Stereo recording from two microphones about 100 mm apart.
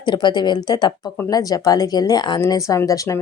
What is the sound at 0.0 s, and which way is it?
A woman's voice, 50° left (ahead or behind).